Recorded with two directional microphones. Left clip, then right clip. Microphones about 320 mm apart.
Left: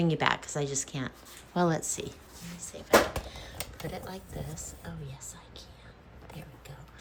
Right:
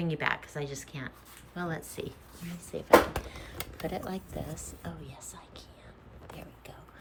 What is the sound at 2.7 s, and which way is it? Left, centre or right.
Speech, centre.